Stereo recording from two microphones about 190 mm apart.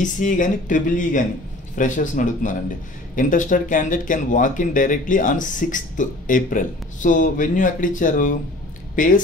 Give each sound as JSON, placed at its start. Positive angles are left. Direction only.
{"t": 0.0, "sound": "speech", "side_deg": 40}